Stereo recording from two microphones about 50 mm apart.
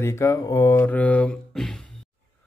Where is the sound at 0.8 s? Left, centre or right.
Left.